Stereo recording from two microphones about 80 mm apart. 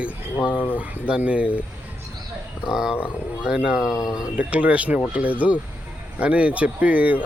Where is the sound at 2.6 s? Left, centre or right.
Centre.